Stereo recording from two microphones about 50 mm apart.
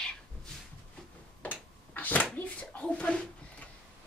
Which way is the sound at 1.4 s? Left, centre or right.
Left.